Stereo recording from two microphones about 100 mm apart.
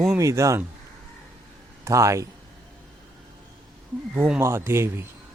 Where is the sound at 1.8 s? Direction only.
30° right (ahead or behind).